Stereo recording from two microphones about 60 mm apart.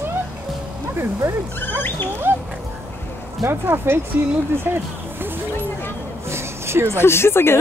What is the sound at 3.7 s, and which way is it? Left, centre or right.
Speech, right.